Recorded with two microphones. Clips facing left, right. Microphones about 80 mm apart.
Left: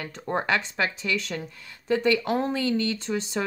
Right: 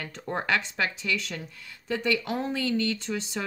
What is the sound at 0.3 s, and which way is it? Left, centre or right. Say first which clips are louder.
Speech: left 2 dB; left.